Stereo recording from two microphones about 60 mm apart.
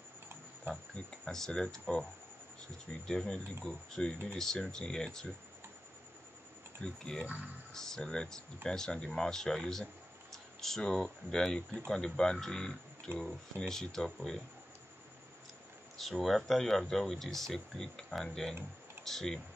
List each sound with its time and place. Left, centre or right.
0.7 s a sound: centre
1.4 s speech: centre
3.1 s speech: centre
6.8 s speech: centre
16.0 s speech: centre